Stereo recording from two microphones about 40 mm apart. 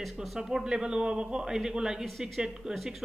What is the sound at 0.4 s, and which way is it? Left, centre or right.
Speech, centre.